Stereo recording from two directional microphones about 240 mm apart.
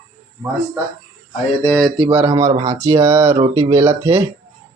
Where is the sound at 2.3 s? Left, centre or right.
Centre.